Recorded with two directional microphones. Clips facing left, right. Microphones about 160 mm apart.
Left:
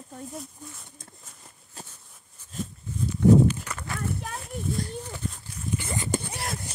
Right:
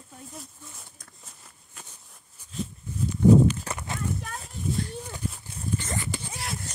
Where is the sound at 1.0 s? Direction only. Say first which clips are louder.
Left 2 dB; 25° left (ahead or behind).